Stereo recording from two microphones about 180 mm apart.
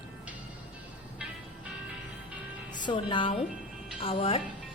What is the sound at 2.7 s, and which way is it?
Music, 25° left (ahead or behind).